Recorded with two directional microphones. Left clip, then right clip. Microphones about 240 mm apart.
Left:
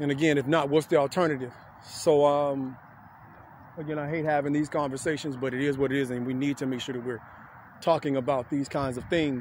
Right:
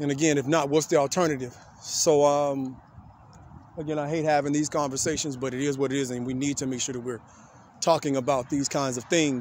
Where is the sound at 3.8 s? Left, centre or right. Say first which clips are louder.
Right 3 dB; centre.